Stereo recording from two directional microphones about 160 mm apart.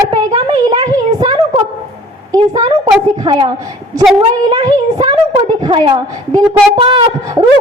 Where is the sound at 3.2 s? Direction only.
30° right (ahead or behind).